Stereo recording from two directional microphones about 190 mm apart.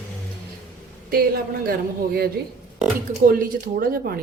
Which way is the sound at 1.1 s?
50° right (ahead or behind).